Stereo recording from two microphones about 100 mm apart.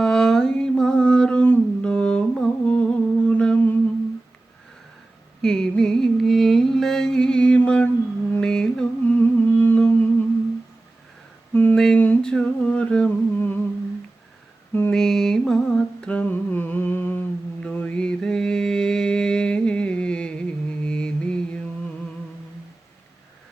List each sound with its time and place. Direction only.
0.0 s a sound: 5° left (ahead or behind)
5.4 s carnatic music: 5° left (ahead or behind)
8.3 s mantra: 10° left (ahead or behind)
9.0 s humming: 15° left (ahead or behind)
11.5 s humming: 10° left (ahead or behind)
14.7 s mantra: 15° left (ahead or behind)
14.9 s humming: 5° left (ahead or behind)